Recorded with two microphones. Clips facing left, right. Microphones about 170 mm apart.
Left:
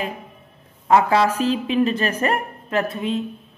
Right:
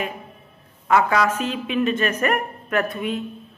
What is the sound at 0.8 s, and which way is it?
A woman's voice, 30° left (ahead or behind).